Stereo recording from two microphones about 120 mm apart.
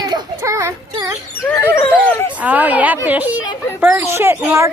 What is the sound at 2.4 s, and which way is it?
Speech, 15° right (ahead or behind).